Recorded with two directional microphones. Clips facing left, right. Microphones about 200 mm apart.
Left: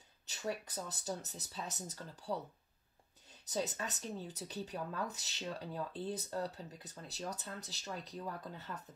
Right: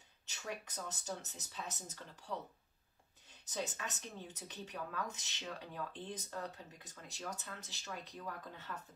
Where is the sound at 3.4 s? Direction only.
35° left (ahead or behind).